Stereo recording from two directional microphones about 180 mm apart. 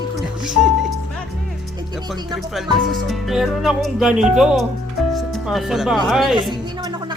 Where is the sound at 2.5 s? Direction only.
Centre (ahead or behind).